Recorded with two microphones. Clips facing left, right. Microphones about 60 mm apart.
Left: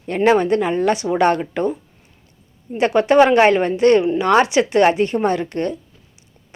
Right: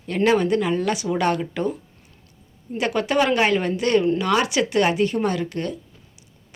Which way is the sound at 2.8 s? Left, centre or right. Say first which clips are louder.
Left 8 dB; left.